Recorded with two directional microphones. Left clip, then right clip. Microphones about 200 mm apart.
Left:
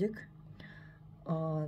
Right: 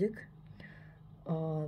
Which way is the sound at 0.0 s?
5° left (ahead or behind).